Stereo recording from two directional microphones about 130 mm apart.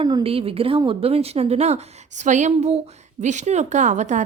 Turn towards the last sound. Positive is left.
turn(degrees=-65)  # may be behind; listen again after turning